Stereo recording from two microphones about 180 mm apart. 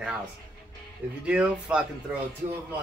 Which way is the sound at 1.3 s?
5° right (ahead or behind).